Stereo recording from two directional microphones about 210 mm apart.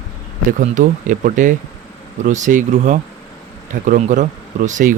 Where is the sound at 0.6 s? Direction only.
35° right (ahead or behind).